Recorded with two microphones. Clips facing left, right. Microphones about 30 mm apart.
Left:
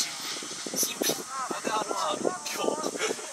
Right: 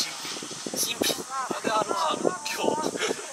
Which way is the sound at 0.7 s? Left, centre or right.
Right.